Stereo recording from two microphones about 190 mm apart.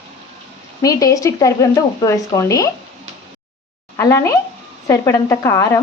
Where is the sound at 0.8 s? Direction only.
20° left (ahead or behind).